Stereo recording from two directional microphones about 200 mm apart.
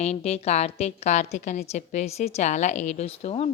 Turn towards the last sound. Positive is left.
turn(degrees=30)  # may be behind; listen again after turning